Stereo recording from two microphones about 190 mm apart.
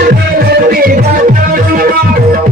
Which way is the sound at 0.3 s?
50° right (ahead or behind).